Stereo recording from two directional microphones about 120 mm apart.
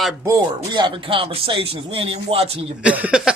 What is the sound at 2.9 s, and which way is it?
Cough, 10° right (ahead or behind).